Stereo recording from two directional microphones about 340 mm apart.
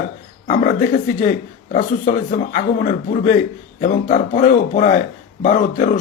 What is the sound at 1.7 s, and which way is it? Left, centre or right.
A man's voice, left.